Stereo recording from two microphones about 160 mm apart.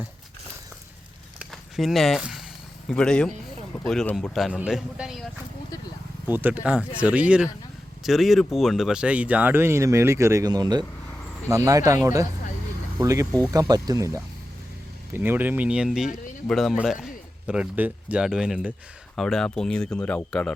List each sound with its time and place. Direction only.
1.4 s a sound: centre (ahead or behind)
2.9 s speech: 5° left (ahead or behind)
6.2 s a man's voice: 10° right (ahead or behind); by 20.5 s 10° left (ahead or behind)